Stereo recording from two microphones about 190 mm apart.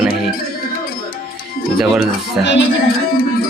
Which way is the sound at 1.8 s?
Centre (ahead or behind).